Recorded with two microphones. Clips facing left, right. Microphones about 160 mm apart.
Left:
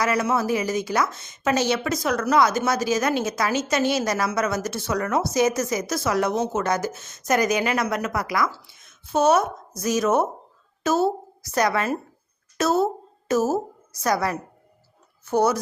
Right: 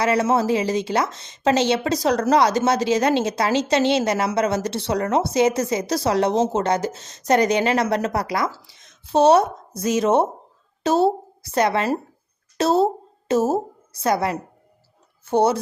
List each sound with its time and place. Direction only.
0.0 s a woman's voice: 30° right (ahead or behind)